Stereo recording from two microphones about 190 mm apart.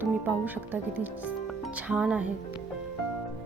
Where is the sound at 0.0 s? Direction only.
10° right (ahead or behind).